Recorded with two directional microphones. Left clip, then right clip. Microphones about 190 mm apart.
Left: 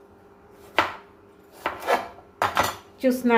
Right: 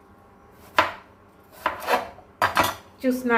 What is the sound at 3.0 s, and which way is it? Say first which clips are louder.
Speech: left 3 dB; 40° left (ahead or behind).